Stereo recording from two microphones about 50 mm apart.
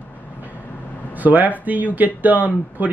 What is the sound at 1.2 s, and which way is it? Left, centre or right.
Speech, right.